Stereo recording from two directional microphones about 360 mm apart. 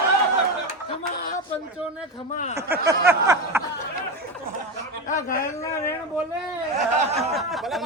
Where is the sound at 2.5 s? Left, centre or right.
Centre.